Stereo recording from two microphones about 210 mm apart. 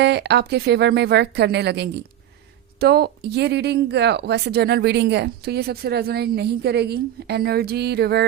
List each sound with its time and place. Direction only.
0.0 s speech: 55° right (ahead or behind)